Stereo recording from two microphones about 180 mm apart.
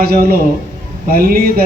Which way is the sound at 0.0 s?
55° right (ahead or behind).